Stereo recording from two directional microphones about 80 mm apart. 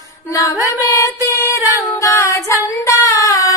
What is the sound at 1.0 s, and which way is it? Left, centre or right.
Music, left.